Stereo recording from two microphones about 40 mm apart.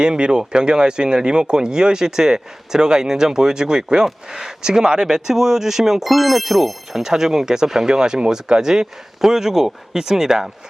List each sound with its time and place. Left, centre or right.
0.0 s speech: right